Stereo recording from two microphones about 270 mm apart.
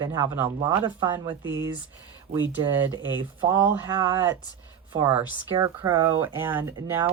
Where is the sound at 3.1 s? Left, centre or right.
Centre.